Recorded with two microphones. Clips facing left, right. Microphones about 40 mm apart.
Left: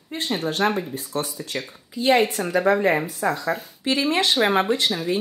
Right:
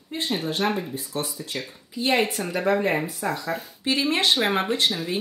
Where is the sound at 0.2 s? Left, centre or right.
Centre.